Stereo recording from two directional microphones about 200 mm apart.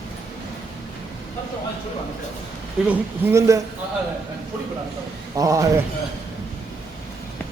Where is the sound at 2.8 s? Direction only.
10° right (ahead or behind).